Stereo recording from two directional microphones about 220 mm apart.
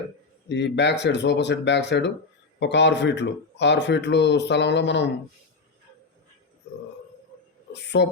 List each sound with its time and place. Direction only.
0.4 s speech: 50° left (ahead or behind)
7.7 s a woman's voice: 50° left (ahead or behind)